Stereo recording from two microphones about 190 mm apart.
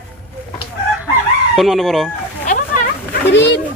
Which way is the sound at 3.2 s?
65° left (ahead or behind).